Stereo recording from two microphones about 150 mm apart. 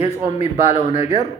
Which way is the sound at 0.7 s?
45° left (ahead or behind).